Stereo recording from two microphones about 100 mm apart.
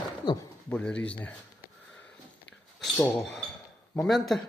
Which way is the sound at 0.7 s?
10° left (ahead or behind).